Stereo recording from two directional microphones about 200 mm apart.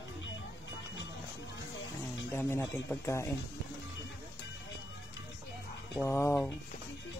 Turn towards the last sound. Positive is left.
turn(degrees=10)  # may be behind; listen again after turning